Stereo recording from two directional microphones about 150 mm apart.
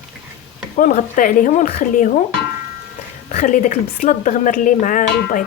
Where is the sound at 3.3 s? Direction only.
55° left (ahead or behind).